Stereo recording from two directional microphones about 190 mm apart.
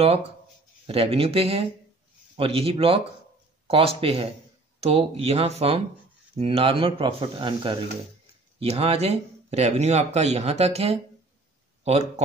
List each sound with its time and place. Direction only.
0.8 s speech: 30° right (ahead or behind)